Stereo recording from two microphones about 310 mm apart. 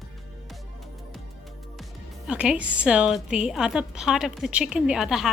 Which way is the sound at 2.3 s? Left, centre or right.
Centre.